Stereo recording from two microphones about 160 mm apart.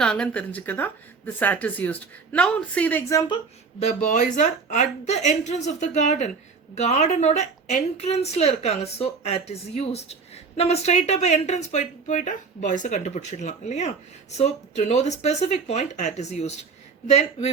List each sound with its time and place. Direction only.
0.0 s speech: 5° left (ahead or behind)
3.8 s a woman's voice: 45° left (ahead or behind)